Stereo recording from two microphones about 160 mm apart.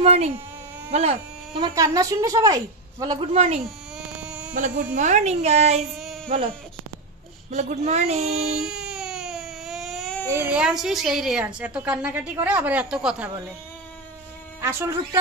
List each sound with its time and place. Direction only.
0.0 s speech: 40° right (ahead or behind)
1.6 s a woman's voice: 20° right (ahead or behind)
3.2 s child singing: 40° right (ahead or behind)
4.0 s baby cry: 5° right (ahead or behind)
4.6 s a woman's voice: 50° right (ahead or behind)
7.5 s a woman's voice: 45° right (ahead or behind)
8.1 s child singing: 40° right (ahead or behind)
8.5 s baby cry: 5° right (ahead or behind)
10.2 s a child's voice: 15° right (ahead or behind)
14.6 s a woman's voice: 15° right (ahead or behind)